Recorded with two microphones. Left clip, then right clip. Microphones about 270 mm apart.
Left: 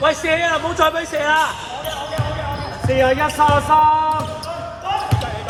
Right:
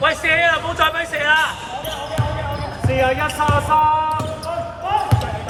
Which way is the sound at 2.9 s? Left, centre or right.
Left.